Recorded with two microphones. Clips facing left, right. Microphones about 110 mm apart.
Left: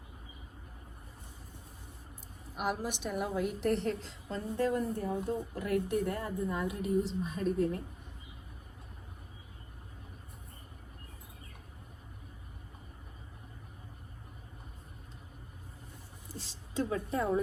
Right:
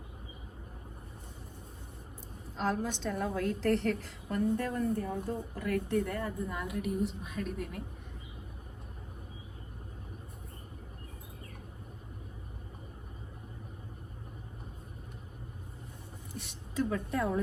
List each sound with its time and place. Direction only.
2.6 s a woman's voice: 15° left (ahead or behind)
16.4 s a woman's voice: 30° left (ahead or behind)